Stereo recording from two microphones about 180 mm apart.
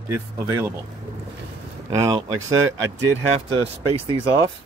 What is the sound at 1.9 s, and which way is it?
Speech, 20° right (ahead or behind).